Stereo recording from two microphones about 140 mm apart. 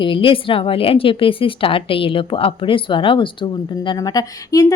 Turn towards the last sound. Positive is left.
turn(degrees=25)  # may be behind; listen again after turning